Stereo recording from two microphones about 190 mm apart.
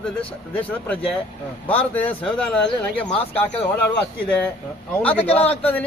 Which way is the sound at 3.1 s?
30° left (ahead or behind).